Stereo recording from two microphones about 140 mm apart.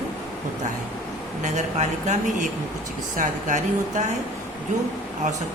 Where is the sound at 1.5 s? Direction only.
55° right (ahead or behind).